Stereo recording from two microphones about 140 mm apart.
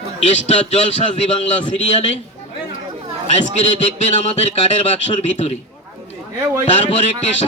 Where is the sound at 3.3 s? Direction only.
50° left (ahead or behind).